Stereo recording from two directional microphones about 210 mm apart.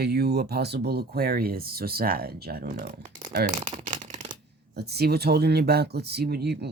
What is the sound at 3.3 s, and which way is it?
Speech, 35° right (ahead or behind).